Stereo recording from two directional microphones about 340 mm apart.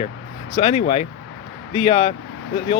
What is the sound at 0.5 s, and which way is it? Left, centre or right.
Speech, centre.